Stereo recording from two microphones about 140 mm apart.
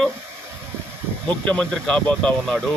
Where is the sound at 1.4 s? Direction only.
10° left (ahead or behind).